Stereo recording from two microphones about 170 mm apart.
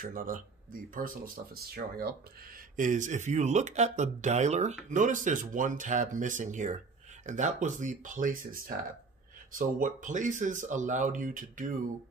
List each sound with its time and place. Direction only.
0.0 s speech: 55° right (ahead or behind)
2.7 s speech: 50° right (ahead or behind)